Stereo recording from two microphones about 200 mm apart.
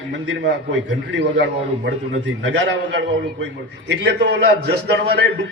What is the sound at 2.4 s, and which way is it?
A man's voice, 60° right (ahead or behind).